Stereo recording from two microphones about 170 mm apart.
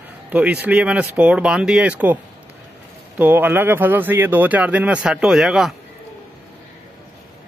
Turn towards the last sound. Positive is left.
turn(degrees=0)  # may be behind; listen again after turning